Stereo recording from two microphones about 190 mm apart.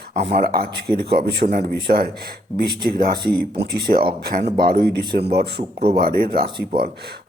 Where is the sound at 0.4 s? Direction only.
55° right (ahead or behind).